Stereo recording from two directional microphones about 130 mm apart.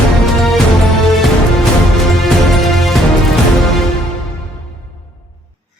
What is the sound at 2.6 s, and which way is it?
Music, centre (ahead or behind).